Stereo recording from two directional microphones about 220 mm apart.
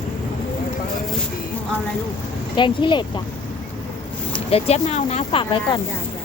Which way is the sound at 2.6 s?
20° left (ahead or behind).